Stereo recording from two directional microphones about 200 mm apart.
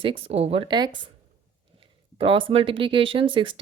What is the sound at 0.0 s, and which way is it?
Speech, 25° right (ahead or behind).